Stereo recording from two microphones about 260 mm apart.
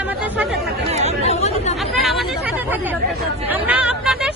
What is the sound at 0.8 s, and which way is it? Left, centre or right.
Speech, right.